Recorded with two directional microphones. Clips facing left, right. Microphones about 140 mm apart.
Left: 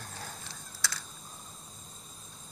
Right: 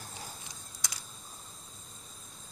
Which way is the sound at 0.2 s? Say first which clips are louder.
Left 2 dB; 15° right (ahead or behind).